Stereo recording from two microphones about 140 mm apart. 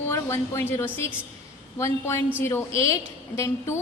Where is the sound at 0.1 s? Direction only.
20° left (ahead or behind).